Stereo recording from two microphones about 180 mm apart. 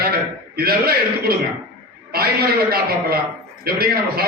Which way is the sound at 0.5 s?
55° right (ahead or behind).